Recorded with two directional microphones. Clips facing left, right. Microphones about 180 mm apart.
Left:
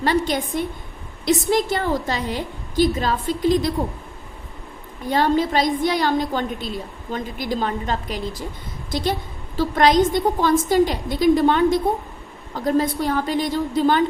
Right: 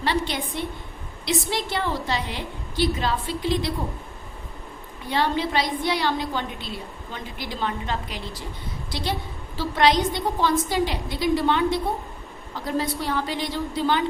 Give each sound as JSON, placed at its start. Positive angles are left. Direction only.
{"t": 0.0, "sound": "a woman's voice", "side_deg": 45}
{"t": 5.0, "sound": "a woman's voice", "side_deg": 45}